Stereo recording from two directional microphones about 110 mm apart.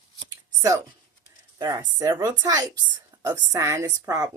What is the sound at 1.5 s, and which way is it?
A woman's voice, 40° right (ahead or behind).